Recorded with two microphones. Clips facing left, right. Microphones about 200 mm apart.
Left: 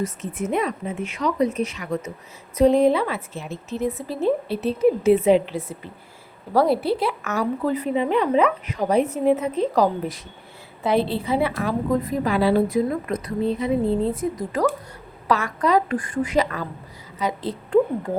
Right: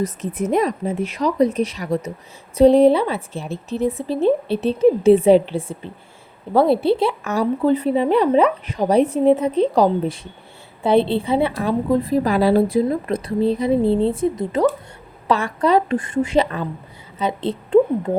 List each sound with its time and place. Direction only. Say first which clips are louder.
0.0 s a woman's voice: right 4 dB; 35° right (ahead or behind)